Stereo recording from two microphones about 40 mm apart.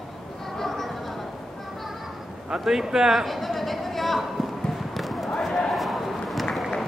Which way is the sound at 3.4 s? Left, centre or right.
Centre.